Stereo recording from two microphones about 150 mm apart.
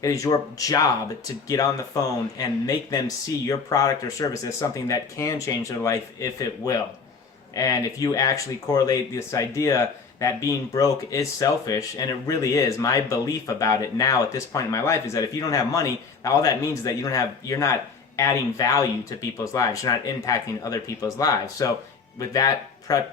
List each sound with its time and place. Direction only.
0.0 s speech: 25° left (ahead or behind)